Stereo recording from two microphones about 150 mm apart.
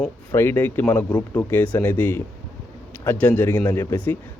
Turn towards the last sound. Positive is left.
turn(degrees=15)  # may be behind; listen again after turning